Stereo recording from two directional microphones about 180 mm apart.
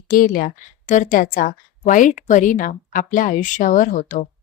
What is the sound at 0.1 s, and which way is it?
Speech, 50° left (ahead or behind).